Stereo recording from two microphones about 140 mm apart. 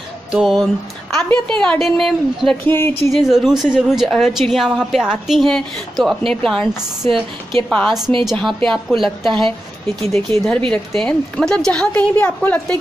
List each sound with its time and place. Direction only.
0.3 s a woman's voice: 5° right (ahead or behind)
2.6 s speech: 15° left (ahead or behind)
3.1 s a woman's voice: centre (ahead or behind)
7.7 s a woman's voice: centre (ahead or behind)